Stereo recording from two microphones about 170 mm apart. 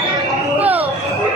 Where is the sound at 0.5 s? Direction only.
10° right (ahead or behind).